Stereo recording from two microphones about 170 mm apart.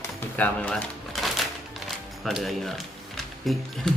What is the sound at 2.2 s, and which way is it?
Speech, centre (ahead or behind).